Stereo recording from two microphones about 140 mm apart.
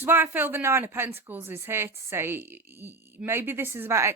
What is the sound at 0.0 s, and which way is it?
Speech, 15° right (ahead or behind).